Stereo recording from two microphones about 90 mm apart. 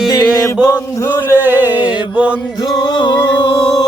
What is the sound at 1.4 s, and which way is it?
Music, 20° right (ahead or behind).